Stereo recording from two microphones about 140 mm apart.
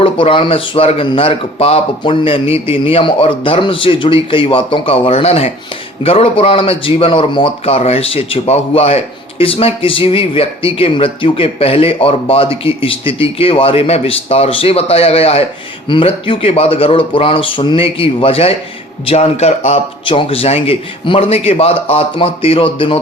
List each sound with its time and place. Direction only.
0.0 s speech: 40° left (ahead or behind)